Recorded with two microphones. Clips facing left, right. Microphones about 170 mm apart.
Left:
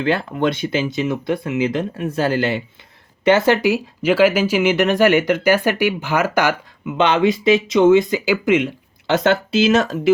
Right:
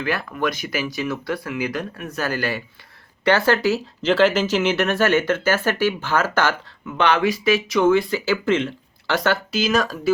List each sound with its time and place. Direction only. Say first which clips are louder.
0.0 s speech: left 5 dB; 25° left (ahead or behind)